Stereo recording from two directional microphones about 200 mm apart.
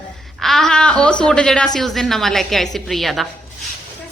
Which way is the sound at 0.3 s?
Centre (ahead or behind).